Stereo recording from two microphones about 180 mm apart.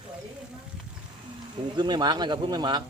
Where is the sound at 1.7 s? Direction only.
25° right (ahead or behind).